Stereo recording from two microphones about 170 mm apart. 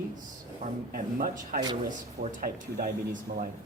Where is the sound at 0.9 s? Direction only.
55° right (ahead or behind).